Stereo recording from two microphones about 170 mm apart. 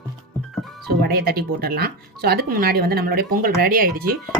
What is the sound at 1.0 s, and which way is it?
Speech, 65° right (ahead or behind).